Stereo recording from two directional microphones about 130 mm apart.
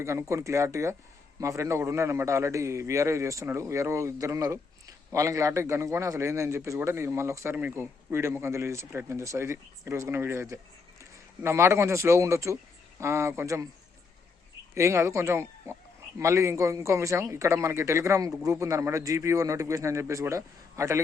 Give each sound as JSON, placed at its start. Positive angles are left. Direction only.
{"t": 0.0, "sound": "a man's voice", "side_deg": -20}
{"t": 14.8, "sound": "a man's voice", "side_deg": -20}